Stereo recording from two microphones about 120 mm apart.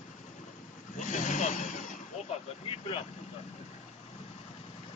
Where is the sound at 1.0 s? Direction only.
90° left.